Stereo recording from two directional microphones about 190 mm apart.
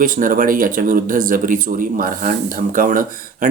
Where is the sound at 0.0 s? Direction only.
45° right (ahead or behind).